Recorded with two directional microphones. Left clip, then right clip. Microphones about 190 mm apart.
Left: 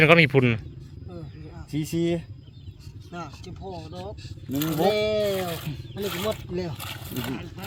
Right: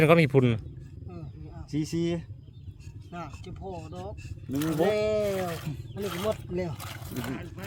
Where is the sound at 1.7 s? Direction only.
45° left (ahead or behind).